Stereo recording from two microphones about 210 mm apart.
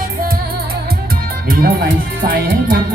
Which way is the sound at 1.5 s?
45° right (ahead or behind).